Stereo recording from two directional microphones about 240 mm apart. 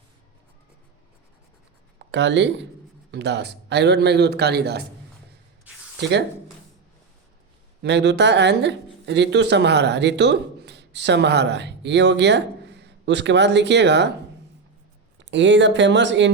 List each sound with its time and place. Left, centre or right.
2.0 s a man's voice: right
6.0 s speech: right
7.8 s speech: right
15.2 s a man's voice: right